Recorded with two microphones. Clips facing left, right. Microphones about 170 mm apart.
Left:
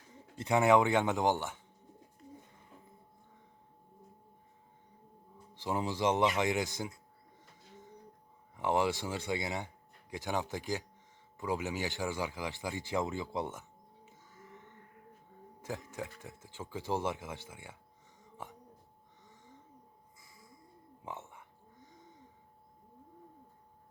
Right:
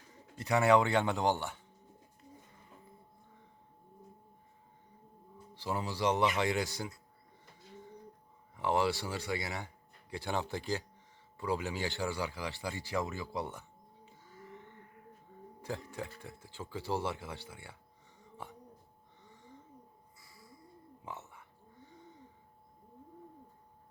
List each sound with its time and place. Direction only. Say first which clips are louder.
0.3 s speech: left 1 dB; 20° left (ahead or behind)
5.6 s speech: left 1 dB; 20° left (ahead or behind)
8.5 s speech: even; 15° left (ahead or behind)
15.6 s speech: even; 15° left (ahead or behind)
18.2 s a sound: even; 15° left (ahead or behind)
21.0 s a sound: left 2 dB; 15° left (ahead or behind)